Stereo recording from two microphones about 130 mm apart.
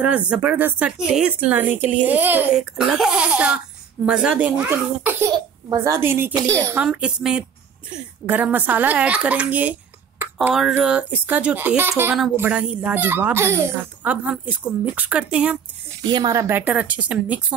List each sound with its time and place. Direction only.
0.0 s speech: 10° right (ahead or behind)
4.6 s a child's voice: 20° right (ahead or behind)
6.8 s a woman's voice: 5° right (ahead or behind)
16.0 s a woman's voice: 35° right (ahead or behind)
16.3 s speech: 15° right (ahead or behind)